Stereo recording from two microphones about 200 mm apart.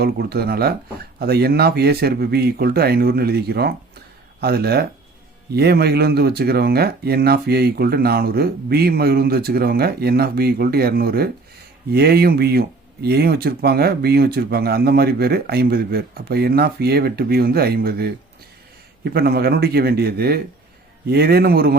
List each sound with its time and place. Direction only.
0.0 s speech: 50° right (ahead or behind)